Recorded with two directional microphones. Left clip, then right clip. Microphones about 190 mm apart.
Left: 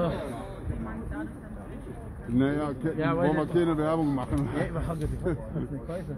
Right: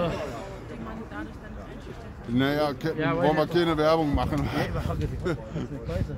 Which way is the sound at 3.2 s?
70° right (ahead or behind).